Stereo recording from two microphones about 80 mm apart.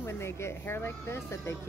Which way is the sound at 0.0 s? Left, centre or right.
Left.